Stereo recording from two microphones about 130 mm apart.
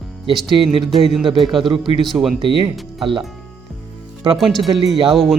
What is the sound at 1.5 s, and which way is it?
Speech, 40° right (ahead or behind).